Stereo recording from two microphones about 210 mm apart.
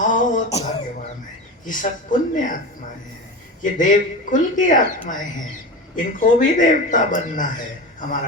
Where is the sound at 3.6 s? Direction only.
40° left (ahead or behind).